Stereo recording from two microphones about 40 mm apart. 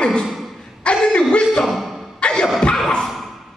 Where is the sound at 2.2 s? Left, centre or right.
Left.